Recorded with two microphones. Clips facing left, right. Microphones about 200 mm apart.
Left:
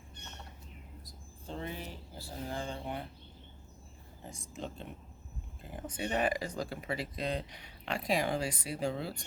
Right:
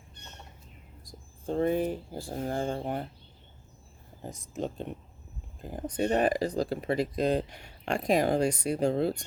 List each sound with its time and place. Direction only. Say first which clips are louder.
1.5 s speech: right 14 dB; 50° right (ahead or behind)
4.5 s speech: right 9 dB; 45° right (ahead or behind)